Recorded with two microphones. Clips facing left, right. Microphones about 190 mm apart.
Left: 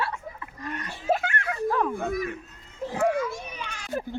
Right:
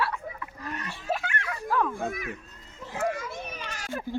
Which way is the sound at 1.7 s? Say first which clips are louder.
Left 1 dB; 25° left (ahead or behind).